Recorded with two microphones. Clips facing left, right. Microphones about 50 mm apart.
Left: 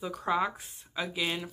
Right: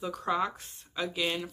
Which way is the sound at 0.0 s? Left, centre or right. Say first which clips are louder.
Left 1 dB; centre.